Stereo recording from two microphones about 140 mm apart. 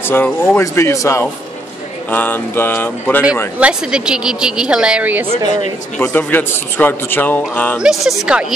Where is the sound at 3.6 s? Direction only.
5° right (ahead or behind).